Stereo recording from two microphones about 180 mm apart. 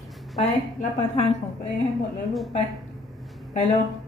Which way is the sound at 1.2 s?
35° left (ahead or behind).